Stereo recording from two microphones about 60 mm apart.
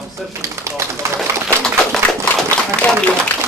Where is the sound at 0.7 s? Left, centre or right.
Right.